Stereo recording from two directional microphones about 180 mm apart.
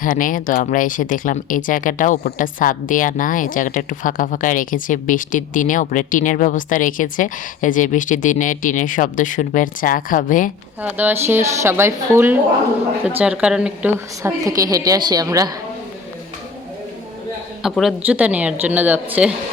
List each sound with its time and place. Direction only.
0.0 s speech: 50° left (ahead or behind)
10.8 s speech: 10° right (ahead or behind)
14.2 s a woman's voice: 20° right (ahead or behind)
17.6 s speech: centre (ahead or behind)